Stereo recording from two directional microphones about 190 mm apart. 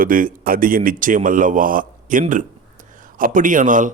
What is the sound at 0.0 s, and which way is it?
Speech, 45° right (ahead or behind).